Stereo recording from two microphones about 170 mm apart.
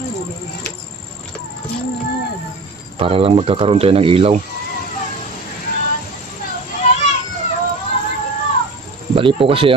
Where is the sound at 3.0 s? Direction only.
35° right (ahead or behind).